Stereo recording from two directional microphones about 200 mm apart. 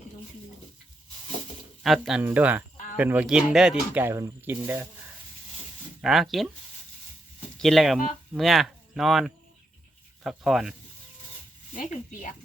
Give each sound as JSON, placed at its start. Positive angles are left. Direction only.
{"t": 1.8, "sound": "speech", "side_deg": 0}
{"t": 6.0, "sound": "speech", "side_deg": 0}
{"t": 7.6, "sound": "speech", "side_deg": 0}
{"t": 11.7, "sound": "speech", "side_deg": 40}